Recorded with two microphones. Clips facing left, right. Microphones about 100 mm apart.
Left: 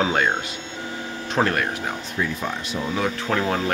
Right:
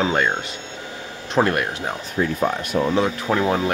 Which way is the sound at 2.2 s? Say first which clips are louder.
Right 6 dB; 50° right (ahead or behind).